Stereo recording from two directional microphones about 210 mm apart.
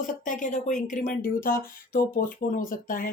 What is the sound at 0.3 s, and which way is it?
Speech, 35° left (ahead or behind).